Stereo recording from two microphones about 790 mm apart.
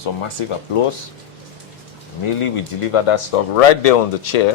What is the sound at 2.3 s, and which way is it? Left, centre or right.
Speech, left.